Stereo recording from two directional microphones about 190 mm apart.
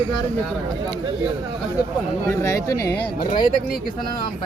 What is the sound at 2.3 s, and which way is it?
Speech, 15° left (ahead or behind).